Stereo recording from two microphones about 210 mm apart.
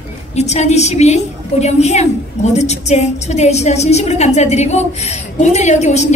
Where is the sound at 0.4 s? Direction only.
30° left (ahead or behind).